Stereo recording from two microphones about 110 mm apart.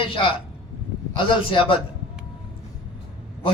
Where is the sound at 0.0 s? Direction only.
55° left (ahead or behind).